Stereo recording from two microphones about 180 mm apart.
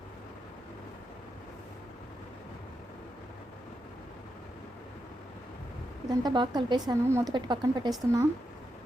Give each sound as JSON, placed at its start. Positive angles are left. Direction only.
{"t": 6.2, "sound": "a woman's voice", "side_deg": -25}